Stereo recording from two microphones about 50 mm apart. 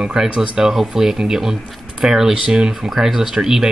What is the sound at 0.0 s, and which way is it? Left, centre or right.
Speech, centre.